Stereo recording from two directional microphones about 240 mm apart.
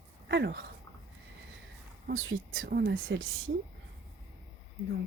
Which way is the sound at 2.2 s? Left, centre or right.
Right.